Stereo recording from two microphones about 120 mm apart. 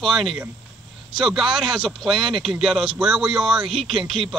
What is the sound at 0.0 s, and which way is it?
Speech, centre (ahead or behind).